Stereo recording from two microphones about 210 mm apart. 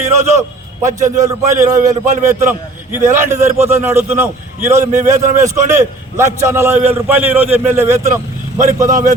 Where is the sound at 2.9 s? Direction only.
10° right (ahead or behind).